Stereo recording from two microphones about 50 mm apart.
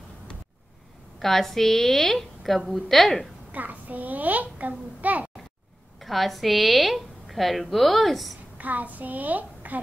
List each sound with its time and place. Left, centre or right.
1.2 s a woman's voice: centre
3.5 s a child's voice: right
5.9 s a woman's voice: centre
8.5 s a child's voice: right